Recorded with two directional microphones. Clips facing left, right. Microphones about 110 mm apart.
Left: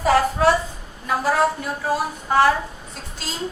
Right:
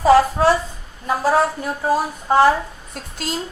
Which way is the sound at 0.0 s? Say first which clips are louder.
Right 4 dB; 30° right (ahead or behind).